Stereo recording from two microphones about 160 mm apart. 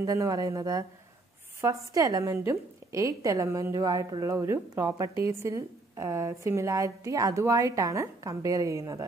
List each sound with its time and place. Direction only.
0.0 s a woman's voice: 20° right (ahead or behind)